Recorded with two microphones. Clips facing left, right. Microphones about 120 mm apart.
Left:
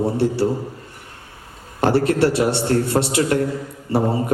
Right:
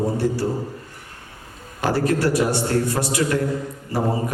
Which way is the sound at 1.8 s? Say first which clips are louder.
Left 4 dB; 30° left (ahead or behind).